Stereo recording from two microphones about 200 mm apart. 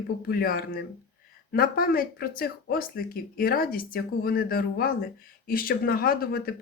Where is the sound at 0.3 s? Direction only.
50° left (ahead or behind).